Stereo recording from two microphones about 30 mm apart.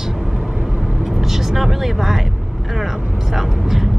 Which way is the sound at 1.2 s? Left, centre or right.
Centre.